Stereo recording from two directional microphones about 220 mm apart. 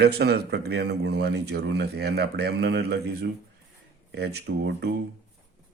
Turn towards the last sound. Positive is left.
turn(degrees=-50)  # may be behind; listen again after turning